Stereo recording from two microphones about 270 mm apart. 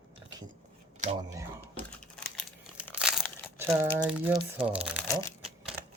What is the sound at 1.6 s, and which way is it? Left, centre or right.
Crumpling, centre.